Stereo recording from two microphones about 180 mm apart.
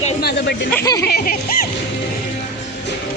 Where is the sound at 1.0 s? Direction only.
55° left (ahead or behind).